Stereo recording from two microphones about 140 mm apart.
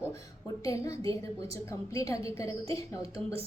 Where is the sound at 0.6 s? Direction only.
20° left (ahead or behind).